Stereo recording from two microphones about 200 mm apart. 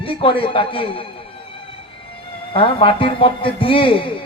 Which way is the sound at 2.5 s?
25° left (ahead or behind).